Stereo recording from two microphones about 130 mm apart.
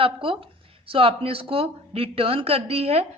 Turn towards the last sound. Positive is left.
turn(degrees=-50)  # may be behind; listen again after turning